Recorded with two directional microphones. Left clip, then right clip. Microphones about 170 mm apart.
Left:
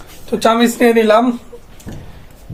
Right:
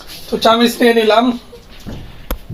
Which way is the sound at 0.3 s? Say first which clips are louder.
Right 1 dB; 25° left (ahead or behind).